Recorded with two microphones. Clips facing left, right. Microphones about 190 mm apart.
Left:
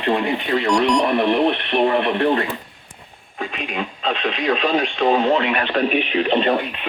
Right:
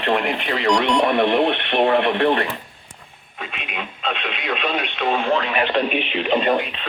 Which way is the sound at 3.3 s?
45° left (ahead or behind).